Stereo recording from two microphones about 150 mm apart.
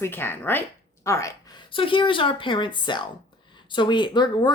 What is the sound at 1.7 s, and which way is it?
A woman's voice, 35° left (ahead or behind).